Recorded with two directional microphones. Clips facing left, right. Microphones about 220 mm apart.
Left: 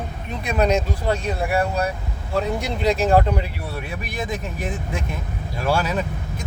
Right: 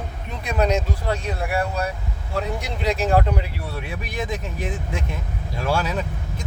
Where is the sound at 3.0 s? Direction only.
30° left (ahead or behind).